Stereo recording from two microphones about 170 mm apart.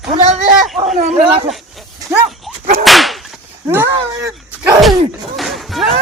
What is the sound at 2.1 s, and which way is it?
Pig, centre (ahead or behind).